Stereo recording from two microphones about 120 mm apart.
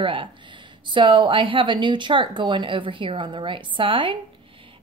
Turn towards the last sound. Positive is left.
turn(degrees=-45)  # may be behind; listen again after turning